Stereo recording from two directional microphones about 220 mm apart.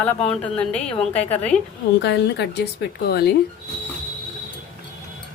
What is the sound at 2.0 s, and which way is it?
A woman's voice, 50° left (ahead or behind).